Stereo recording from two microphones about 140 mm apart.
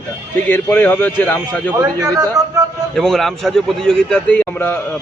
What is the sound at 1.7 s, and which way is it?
Speech, 25° right (ahead or behind).